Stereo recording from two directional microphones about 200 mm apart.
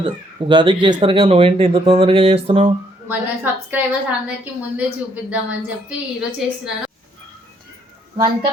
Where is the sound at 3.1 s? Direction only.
10° right (ahead or behind).